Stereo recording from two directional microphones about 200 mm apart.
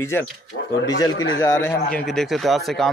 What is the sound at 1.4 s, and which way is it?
Speech, 10° left (ahead or behind).